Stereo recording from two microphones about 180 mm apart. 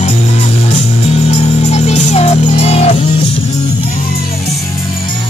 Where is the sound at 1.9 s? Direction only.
35° left (ahead or behind).